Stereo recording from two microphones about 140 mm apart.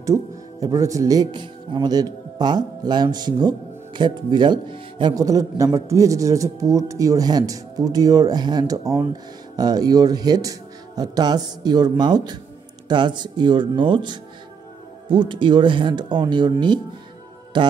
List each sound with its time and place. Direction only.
0.0 s speech: 25° right (ahead or behind)
17.5 s mantra: 35° right (ahead or behind)